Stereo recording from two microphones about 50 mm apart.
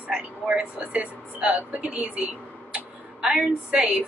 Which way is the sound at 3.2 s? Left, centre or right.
Centre.